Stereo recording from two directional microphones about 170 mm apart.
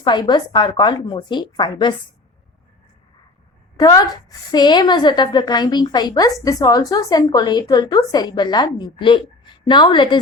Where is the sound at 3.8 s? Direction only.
20° left (ahead or behind).